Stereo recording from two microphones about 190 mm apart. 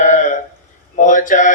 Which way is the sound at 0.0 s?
40° left (ahead or behind).